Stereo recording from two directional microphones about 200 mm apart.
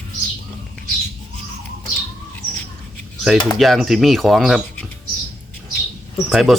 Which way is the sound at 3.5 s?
Centre (ahead or behind).